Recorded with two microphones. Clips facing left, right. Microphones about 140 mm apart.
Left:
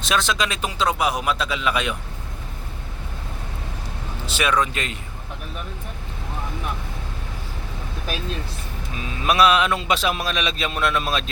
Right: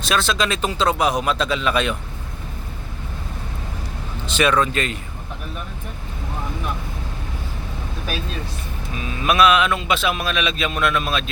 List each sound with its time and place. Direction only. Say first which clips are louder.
0.0 s a man's voice: right 2 dB; 15° left (ahead or behind)
4.3 s a man's voice: right 3 dB; 10° left (ahead or behind)
9.0 s a man's voice: right 1 dB; 30° left (ahead or behind)